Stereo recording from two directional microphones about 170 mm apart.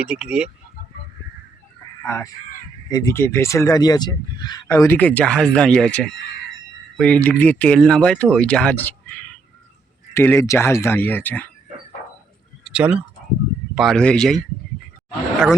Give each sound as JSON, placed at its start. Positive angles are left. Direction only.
{"t": 0.0, "sound": "speech", "side_deg": -5}
{"t": 2.0, "sound": "speech", "side_deg": 15}
{"t": 12.6, "sound": "a sound", "side_deg": -5}
{"t": 13.7, "sound": "speech", "side_deg": 0}